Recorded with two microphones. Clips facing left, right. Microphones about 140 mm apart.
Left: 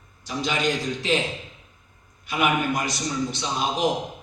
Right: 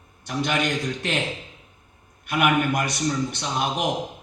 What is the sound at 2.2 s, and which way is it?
A man's voice, 60° right (ahead or behind).